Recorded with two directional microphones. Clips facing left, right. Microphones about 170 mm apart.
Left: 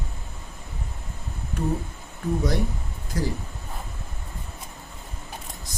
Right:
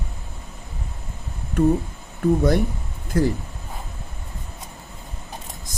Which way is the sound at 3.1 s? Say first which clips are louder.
Right 8 dB; 60° right (ahead or behind).